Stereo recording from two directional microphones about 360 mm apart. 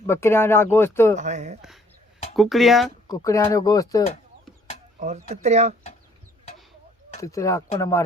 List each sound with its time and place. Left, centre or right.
0.1 s speech: centre
1.1 s speech: centre
2.3 s speech: centre
4.9 s speech: centre
7.1 s speech: centre